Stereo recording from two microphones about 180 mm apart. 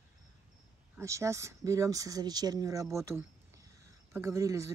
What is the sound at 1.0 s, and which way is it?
Speech, 15° right (ahead or behind).